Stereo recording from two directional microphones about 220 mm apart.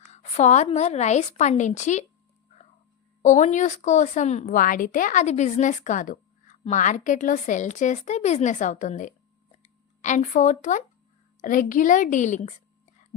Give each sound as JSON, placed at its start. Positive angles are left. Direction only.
{"t": 0.1, "sound": "a woman's voice", "side_deg": 30}
{"t": 3.2, "sound": "a woman's voice", "side_deg": 35}